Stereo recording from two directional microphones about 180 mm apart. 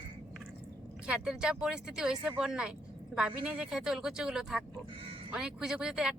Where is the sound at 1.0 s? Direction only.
5° right (ahead or behind).